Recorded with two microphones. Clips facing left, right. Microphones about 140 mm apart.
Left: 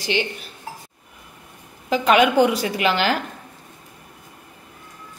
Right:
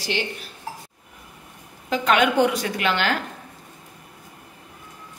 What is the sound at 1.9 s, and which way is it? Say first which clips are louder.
A woman's voice: left 3 dB; 5° left (ahead or behind).